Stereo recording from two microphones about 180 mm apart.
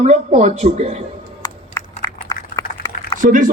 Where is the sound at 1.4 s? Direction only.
20° left (ahead or behind).